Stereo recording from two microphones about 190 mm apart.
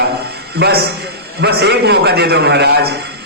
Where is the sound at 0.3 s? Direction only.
60° right (ahead or behind).